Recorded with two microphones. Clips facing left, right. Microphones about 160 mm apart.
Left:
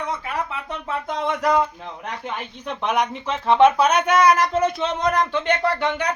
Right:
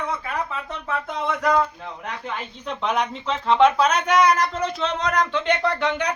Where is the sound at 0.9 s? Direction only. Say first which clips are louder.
Left 1 dB; 20° left (ahead or behind).